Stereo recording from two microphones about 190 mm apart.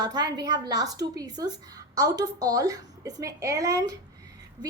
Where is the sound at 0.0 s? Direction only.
20° right (ahead or behind).